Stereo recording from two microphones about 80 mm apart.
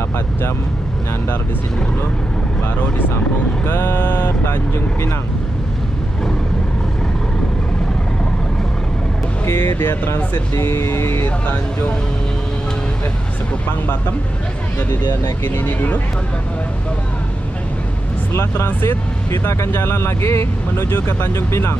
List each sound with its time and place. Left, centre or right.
3.6 s speech: left
9.5 s speech: left
11.4 s speech: centre
15.4 s speech: left
18.3 s speech: left
18.7 s speech: left